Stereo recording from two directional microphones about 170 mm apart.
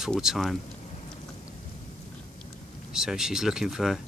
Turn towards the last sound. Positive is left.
turn(degrees=0)  # may be behind; listen again after turning